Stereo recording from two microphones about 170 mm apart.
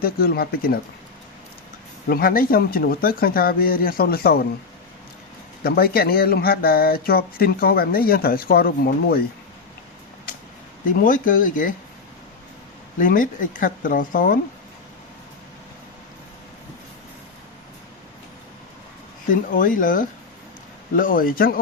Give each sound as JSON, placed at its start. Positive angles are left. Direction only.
{"t": 0.0, "sound": "speech", "side_deg": 60}
{"t": 2.0, "sound": "speech", "side_deg": 60}
{"t": 5.6, "sound": "speech", "side_deg": 60}
{"t": 10.9, "sound": "speech", "side_deg": 50}
{"t": 13.0, "sound": "speech", "side_deg": 50}
{"t": 19.3, "sound": "speech", "side_deg": 50}